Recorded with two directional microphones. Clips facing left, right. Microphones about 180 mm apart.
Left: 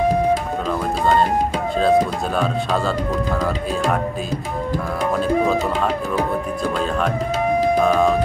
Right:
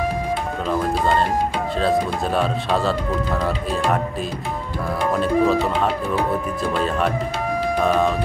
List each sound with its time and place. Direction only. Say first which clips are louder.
1.8 s speech: left 4 dB; centre (ahead or behind)
7.8 s speech: right 1 dB; centre (ahead or behind)